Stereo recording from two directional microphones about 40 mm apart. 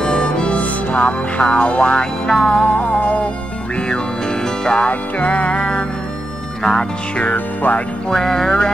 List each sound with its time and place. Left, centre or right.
0.0 s music: left
2.9 s music: left
4.6 s music: left
6.6 s music: centre
7.3 s music: left
8.1 s music: centre